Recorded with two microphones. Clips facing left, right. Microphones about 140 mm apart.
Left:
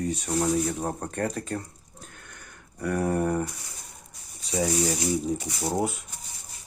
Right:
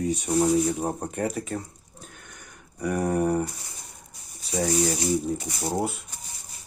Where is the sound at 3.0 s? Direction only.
10° right (ahead or behind).